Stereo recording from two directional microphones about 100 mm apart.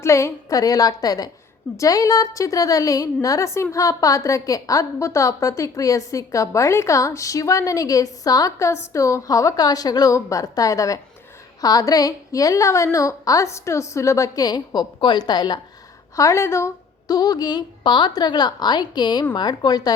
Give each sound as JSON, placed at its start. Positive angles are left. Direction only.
{"t": 0.0, "sound": "a woman's voice", "side_deg": 30}
{"t": 16.1, "sound": "a woman's voice", "side_deg": 30}
{"t": 17.1, "sound": "a woman's voice", "side_deg": 40}